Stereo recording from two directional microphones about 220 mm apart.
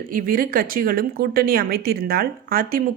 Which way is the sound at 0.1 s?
40° right (ahead or behind).